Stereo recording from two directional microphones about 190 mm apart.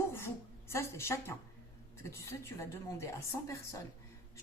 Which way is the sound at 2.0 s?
15° left (ahead or behind).